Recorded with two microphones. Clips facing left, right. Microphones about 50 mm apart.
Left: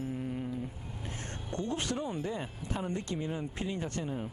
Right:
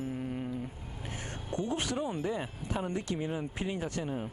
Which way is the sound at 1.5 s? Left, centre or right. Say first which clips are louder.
Right 1 dB; centre.